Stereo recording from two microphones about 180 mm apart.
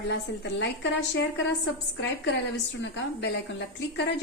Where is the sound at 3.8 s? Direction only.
70° left (ahead or behind).